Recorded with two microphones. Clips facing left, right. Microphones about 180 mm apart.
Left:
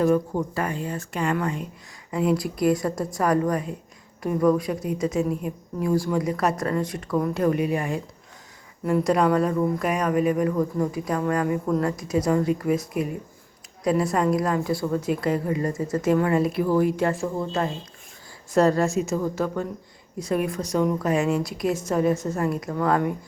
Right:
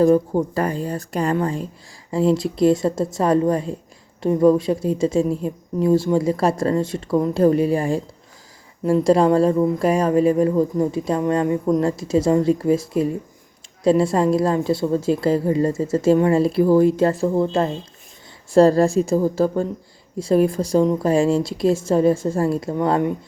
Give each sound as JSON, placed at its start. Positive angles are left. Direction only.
{"t": 0.0, "sound": "a woman's voice", "side_deg": -30}